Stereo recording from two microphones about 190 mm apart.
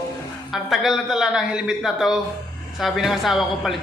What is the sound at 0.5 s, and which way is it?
A man's voice, centre (ahead or behind).